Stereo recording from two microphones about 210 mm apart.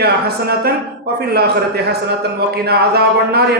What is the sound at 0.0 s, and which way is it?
Speech, 50° right (ahead or behind).